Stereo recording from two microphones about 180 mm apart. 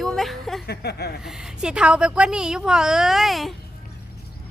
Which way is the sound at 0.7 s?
65° left (ahead or behind).